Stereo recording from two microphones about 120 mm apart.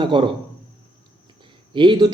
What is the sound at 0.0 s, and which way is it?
Speech, 45° right (ahead or behind).